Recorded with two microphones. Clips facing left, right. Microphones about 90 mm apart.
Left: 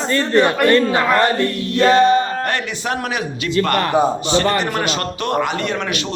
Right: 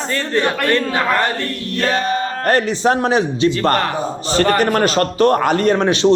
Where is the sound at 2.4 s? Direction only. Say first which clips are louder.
Right 7 dB; 35° right (ahead or behind).